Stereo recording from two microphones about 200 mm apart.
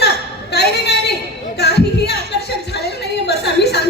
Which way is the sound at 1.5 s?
55° left (ahead or behind).